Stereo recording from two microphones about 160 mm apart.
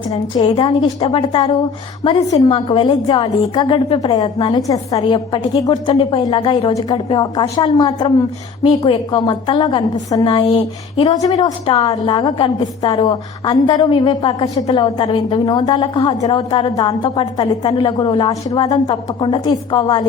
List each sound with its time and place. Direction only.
0.5 s a woman's voice: 30° left (ahead or behind)